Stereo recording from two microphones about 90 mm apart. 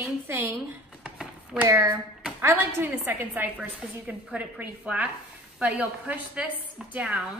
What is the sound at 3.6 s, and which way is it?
Speech, 10° right (ahead or behind).